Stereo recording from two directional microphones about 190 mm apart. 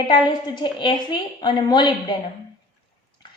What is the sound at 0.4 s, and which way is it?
A woman's voice, 25° left (ahead or behind).